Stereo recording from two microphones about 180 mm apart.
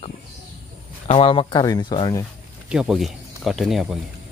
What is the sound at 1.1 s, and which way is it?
Speech, 30° left (ahead or behind).